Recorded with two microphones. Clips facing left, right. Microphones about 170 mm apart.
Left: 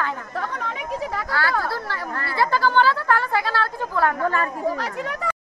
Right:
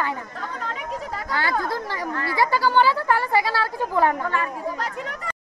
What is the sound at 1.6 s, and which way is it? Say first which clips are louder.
A woman's voice: right 1 dB; 15° right (ahead or behind).